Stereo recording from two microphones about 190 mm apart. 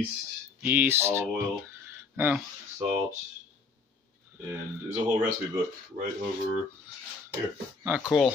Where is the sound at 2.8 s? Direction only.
30° right (ahead or behind).